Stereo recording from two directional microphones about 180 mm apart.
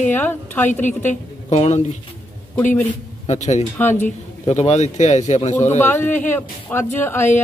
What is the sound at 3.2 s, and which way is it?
A man's voice, 40° left (ahead or behind).